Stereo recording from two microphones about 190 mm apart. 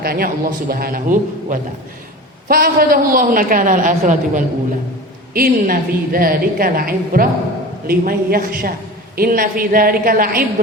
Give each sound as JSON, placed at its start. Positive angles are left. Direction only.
{"t": 0.0, "sound": "a woman's voice", "side_deg": -50}